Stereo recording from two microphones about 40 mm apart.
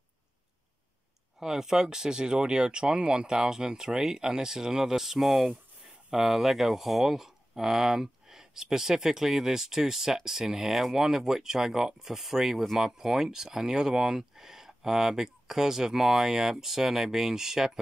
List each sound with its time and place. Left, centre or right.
1.4 s speech: centre